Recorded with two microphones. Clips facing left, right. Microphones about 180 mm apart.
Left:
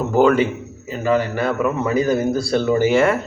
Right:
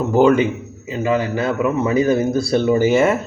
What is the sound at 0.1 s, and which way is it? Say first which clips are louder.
A man's voice: right 1 dB; 15° right (ahead or behind).